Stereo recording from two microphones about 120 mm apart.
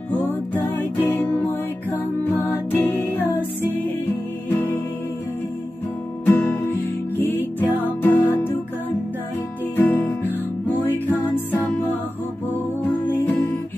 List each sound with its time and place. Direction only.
0.7 s music: 20° left (ahead or behind)
6.2 s music: 15° left (ahead or behind)
7.8 s music: 15° left (ahead or behind)
9.8 s music: 15° left (ahead or behind)
13.0 s music: 15° left (ahead or behind)